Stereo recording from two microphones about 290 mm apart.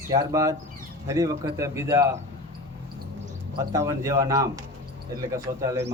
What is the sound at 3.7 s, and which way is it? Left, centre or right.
Speech, centre.